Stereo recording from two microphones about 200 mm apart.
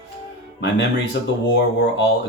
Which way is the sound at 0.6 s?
60° left (ahead or behind).